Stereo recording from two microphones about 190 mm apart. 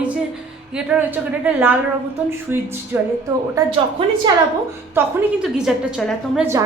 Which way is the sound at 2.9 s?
10° right (ahead or behind).